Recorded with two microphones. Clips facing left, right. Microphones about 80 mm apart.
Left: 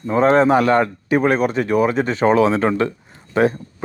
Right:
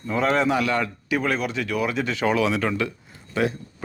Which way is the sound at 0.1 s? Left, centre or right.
Left.